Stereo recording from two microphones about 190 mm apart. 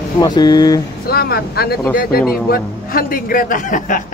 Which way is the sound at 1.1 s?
55° left (ahead or behind).